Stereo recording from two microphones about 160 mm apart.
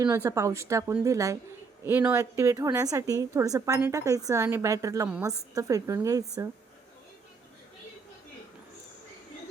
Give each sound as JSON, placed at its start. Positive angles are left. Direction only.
{"t": 0.0, "sound": "a woman's voice", "side_deg": -20}